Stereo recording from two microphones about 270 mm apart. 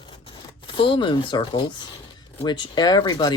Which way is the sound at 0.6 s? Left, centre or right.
Centre.